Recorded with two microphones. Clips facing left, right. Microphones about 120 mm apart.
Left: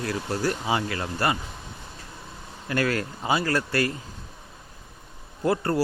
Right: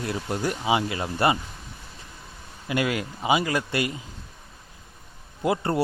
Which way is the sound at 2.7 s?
15° right (ahead or behind).